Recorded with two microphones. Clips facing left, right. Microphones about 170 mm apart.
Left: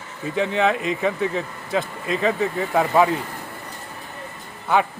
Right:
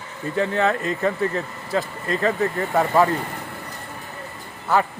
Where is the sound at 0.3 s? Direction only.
15° left (ahead or behind).